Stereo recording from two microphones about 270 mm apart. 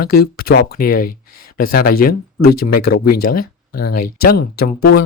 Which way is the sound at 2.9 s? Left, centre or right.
Left.